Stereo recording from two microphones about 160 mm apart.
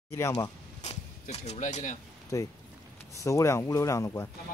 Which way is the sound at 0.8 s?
45° left (ahead or behind).